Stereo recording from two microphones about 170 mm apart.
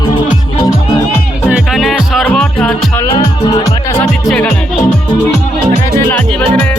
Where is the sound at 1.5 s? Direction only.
5° right (ahead or behind).